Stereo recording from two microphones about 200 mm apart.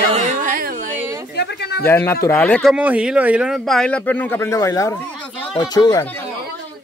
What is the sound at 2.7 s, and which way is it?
Speech, 5° right (ahead or behind).